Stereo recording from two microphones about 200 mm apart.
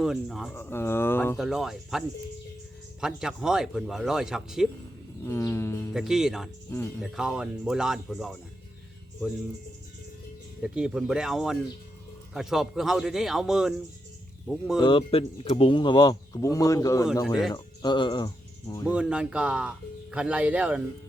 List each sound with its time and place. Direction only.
0.0 s speech: centre (ahead or behind)
0.5 s speech: 10° left (ahead or behind)
1.4 s speech: 5° right (ahead or behind)
5.2 s speech: 15° left (ahead or behind)
5.9 s speech: centre (ahead or behind)
6.7 s speech: 15° left (ahead or behind)
7.0 s speech: 5° right (ahead or behind)
10.6 s speech: 5° right (ahead or behind)
14.8 s speech: 25° left (ahead or behind)
18.9 s speech: 5° right (ahead or behind)